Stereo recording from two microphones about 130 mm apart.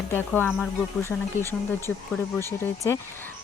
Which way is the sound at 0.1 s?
15° left (ahead or behind).